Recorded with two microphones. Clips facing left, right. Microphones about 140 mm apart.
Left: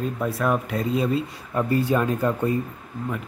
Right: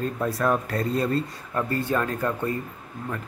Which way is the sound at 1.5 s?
15° left (ahead or behind).